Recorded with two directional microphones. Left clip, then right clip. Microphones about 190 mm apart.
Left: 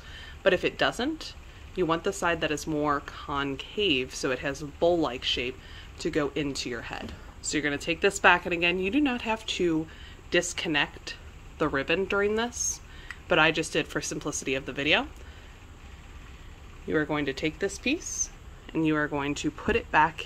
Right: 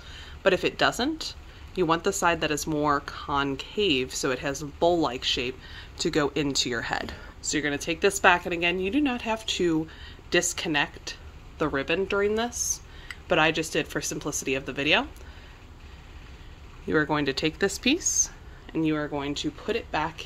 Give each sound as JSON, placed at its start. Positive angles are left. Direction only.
{"t": 0.1, "sound": "speech", "side_deg": -15}
{"t": 7.4, "sound": "speech", "side_deg": -10}
{"t": 16.9, "sound": "speech", "side_deg": -20}
{"t": 18.7, "sound": "speech", "side_deg": 0}